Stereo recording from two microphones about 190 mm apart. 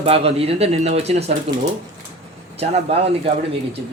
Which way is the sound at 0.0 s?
30° right (ahead or behind).